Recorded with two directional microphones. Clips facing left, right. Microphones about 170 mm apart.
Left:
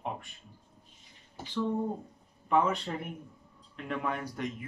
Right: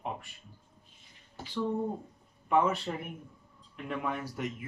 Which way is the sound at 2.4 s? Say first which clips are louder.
Even; 5° right (ahead or behind).